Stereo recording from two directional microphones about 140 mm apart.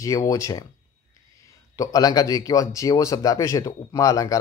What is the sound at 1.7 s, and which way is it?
Speech, 25° left (ahead or behind).